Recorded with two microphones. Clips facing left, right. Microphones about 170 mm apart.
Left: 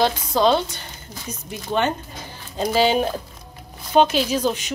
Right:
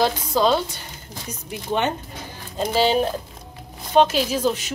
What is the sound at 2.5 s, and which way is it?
A woman's voice, centre (ahead or behind).